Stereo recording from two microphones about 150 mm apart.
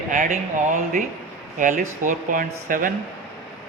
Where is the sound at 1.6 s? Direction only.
65° right (ahead or behind).